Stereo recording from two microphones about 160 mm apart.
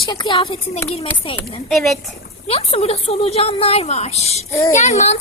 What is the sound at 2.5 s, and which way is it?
A woman's voice, 35° left (ahead or behind).